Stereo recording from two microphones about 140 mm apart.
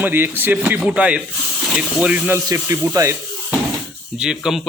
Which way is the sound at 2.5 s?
25° right (ahead or behind).